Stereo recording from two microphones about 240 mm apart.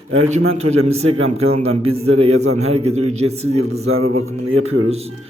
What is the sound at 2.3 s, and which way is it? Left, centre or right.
Mantra, right.